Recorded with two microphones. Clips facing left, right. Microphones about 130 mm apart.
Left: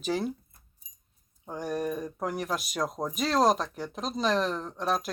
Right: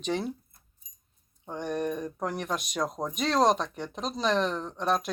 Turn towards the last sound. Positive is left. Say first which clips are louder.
# right 1 dB
turn(degrees=0)  # may be behind; listen again after turning